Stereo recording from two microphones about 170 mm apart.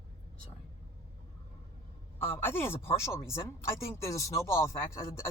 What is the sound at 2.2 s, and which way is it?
Speech, 15° left (ahead or behind).